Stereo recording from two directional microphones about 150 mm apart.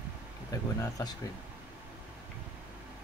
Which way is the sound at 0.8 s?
25° left (ahead or behind).